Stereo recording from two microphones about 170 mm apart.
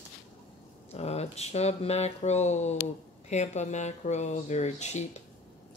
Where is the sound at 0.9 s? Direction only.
40° left (ahead or behind).